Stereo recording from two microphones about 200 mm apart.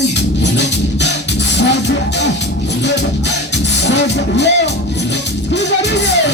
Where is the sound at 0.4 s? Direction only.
60° left (ahead or behind).